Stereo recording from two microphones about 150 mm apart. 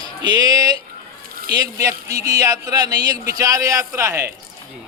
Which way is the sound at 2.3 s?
25° right (ahead or behind).